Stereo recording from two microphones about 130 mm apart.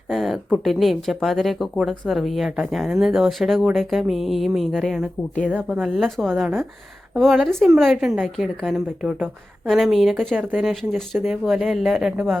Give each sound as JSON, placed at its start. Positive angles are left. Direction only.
{"t": 0.1, "sound": "speech", "side_deg": 0}